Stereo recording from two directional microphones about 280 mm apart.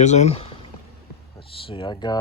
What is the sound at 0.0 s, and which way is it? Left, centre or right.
Speech, left.